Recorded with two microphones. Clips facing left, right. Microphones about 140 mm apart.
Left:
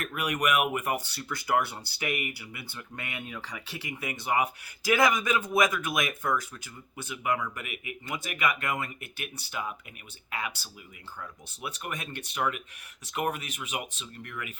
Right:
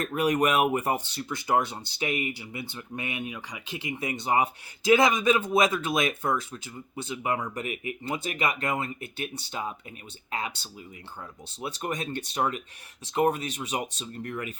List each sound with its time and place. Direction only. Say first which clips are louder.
0.0 s speech: right 6 dB; 30° right (ahead or behind)